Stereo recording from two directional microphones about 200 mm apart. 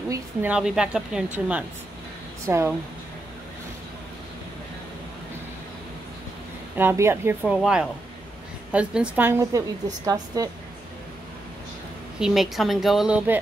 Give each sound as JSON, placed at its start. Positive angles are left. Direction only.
{"t": 0.1, "sound": "a woman's voice", "side_deg": -10}
{"t": 6.8, "sound": "speech", "side_deg": -10}
{"t": 12.2, "sound": "a woman's voice", "side_deg": 0}